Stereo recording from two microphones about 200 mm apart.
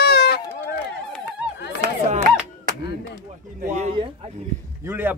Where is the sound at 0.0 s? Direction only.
55° left (ahead or behind).